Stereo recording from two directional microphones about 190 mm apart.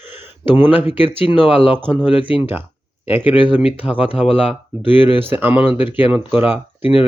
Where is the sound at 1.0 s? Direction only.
30° left (ahead or behind).